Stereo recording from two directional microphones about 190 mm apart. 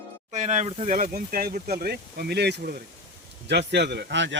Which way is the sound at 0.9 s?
50° right (ahead or behind).